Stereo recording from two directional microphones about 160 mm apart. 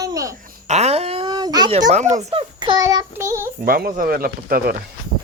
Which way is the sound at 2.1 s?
45° right (ahead or behind).